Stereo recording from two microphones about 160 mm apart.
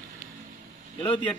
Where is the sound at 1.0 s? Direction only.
30° left (ahead or behind).